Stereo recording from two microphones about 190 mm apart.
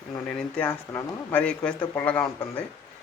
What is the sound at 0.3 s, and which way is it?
A man's voice, 5° left (ahead or behind).